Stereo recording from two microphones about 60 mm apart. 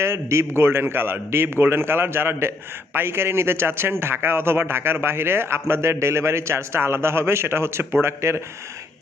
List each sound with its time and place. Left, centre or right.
0.0 s a man's voice: right